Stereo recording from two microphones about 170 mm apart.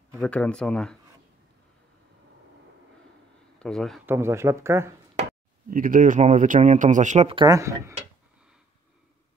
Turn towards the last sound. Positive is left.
turn(degrees=-15)  # may be behind; listen again after turning